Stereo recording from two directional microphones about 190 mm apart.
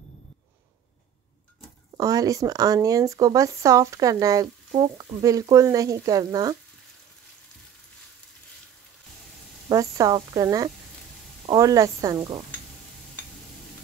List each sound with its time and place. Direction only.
2.0 s speech: 20° right (ahead or behind)
9.7 s a woman's voice: 20° right (ahead or behind)